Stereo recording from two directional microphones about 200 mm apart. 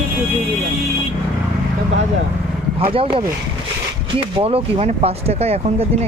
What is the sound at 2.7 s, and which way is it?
Speech, 25° right (ahead or behind).